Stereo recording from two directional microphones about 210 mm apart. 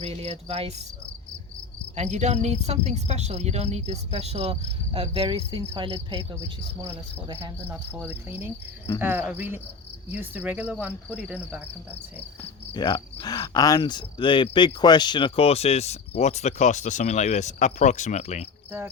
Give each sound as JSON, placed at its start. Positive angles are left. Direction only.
{"t": 0.0, "sound": "cricket", "side_deg": -30}
{"t": 2.0, "sound": "cricket", "side_deg": -35}
{"t": 7.4, "sound": "cricket", "side_deg": -10}
{"t": 12.7, "sound": "cricket", "side_deg": 20}